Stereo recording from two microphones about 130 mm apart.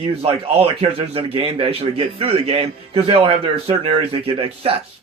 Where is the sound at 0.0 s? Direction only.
45° right (ahead or behind).